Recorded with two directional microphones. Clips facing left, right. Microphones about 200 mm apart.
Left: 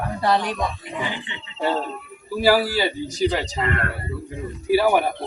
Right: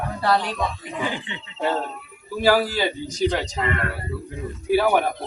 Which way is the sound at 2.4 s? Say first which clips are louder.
Left 1 dB; 5° left (ahead or behind).